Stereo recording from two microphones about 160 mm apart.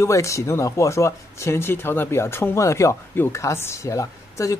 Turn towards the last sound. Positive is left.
turn(degrees=20)  # may be behind; listen again after turning